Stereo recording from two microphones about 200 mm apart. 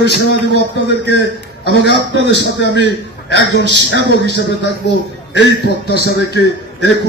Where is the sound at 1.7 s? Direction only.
60° right (ahead or behind).